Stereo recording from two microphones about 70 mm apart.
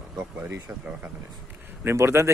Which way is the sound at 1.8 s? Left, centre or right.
Right.